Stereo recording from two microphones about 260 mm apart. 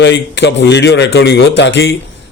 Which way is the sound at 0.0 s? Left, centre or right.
Left.